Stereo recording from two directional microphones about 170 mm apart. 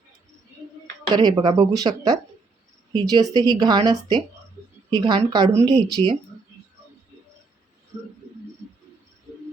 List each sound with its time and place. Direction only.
1.1 s speech: 25° right (ahead or behind)
6.0 s speech: 35° right (ahead or behind)